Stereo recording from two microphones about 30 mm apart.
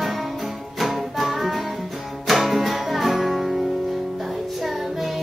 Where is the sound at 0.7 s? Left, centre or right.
Centre.